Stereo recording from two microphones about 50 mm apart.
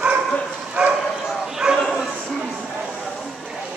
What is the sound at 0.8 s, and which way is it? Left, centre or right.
Bow-wow, right.